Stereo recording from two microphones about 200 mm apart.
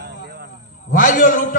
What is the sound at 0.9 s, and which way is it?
Speech, 45° left (ahead or behind).